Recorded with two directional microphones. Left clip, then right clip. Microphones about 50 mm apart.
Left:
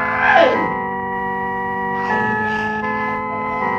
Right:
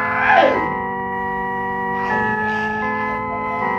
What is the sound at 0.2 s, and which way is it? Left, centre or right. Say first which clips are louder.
Music: left 1 dB; right.